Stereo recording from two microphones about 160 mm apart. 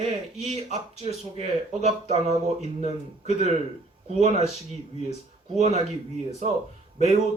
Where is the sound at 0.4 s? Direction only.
45° right (ahead or behind).